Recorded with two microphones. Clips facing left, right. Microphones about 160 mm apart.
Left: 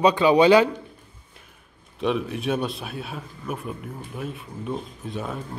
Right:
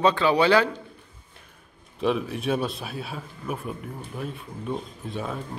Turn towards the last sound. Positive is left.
turn(degrees=0)  # may be behind; listen again after turning